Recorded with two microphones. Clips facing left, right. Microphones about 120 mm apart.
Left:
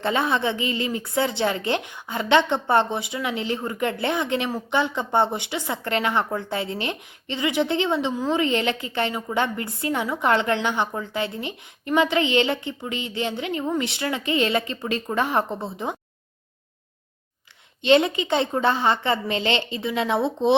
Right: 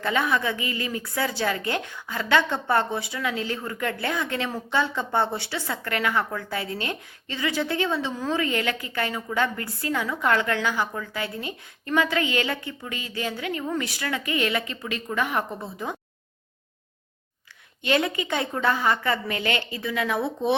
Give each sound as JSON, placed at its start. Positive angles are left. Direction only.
{"t": 0.0, "sound": "a woman's voice", "side_deg": 25}
{"t": 17.8, "sound": "a woman's voice", "side_deg": 25}